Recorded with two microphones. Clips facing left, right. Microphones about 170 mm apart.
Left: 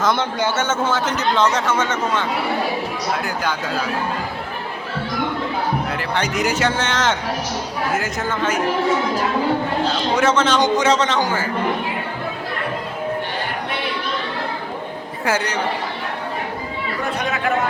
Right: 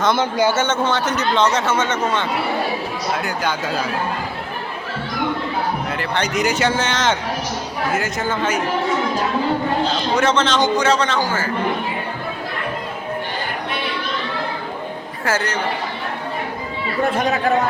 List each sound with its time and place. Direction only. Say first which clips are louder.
0.0 s a man's voice: right 3 dB; 5° right (ahead or behind)
0.7 s a man's voice: right 1 dB; 5° left (ahead or behind)
6.0 s a man's voice: right 1 dB; 5° left (ahead or behind)
10.2 s a man's voice: even; 10° left (ahead or behind)
15.2 s a man's voice: even; 15° left (ahead or behind)
17.2 s speech: right 4 dB; 40° right (ahead or behind)